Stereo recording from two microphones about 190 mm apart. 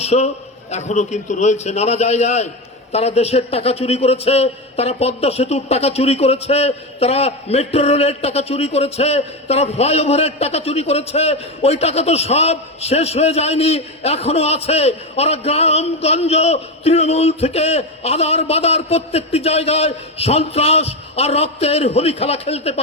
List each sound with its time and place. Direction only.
0.0 s a man's voice: 35° left (ahead or behind)